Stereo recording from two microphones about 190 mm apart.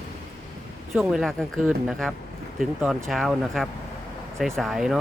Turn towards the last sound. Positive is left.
turn(degrees=0)  # may be behind; listen again after turning